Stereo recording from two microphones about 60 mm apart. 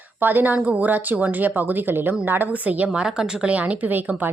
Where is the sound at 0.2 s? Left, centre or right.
Right.